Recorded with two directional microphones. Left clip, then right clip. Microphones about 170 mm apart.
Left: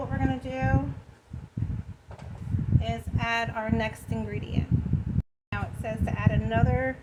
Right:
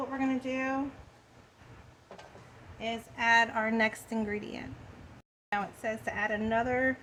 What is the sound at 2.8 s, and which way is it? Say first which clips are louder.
A woman's voice: right 3 dB; 30° right (ahead or behind).